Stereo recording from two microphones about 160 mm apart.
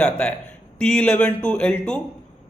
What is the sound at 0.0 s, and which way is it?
A man's voice, 5° left (ahead or behind).